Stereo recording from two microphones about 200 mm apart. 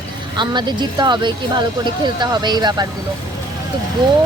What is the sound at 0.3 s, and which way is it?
Speech, 20° right (ahead or behind).